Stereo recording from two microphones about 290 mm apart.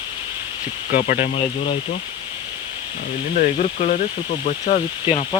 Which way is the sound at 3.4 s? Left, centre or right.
Left.